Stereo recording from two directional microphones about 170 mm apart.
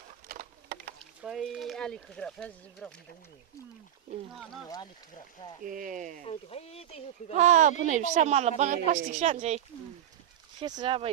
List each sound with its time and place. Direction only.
0.3 s a sound: 60° right (ahead or behind)
1.2 s speech: centre (ahead or behind)
5.6 s a woman's voice: 55° right (ahead or behind)
6.2 s speech: 35° left (ahead or behind)
7.3 s a woman's voice: 45° right (ahead or behind)
10.6 s speech: 25° right (ahead or behind)